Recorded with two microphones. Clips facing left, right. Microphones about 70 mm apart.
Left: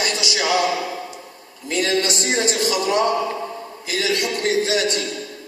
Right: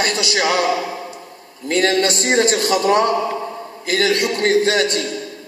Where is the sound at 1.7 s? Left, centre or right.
Right.